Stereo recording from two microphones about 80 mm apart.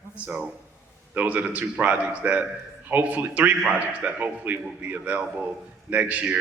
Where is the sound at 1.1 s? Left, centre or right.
Centre.